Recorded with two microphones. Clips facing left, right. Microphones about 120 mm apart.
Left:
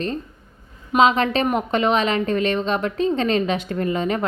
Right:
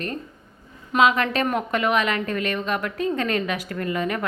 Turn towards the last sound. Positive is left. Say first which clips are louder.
# left 3 dB
turn(degrees=25)  # may be behind; listen again after turning